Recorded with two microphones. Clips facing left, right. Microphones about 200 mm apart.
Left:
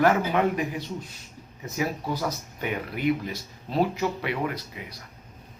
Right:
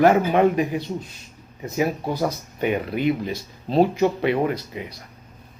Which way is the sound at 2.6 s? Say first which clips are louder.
Right 5 dB; 25° right (ahead or behind).